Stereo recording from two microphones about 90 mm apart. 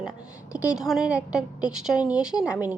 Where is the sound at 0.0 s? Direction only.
10° right (ahead or behind).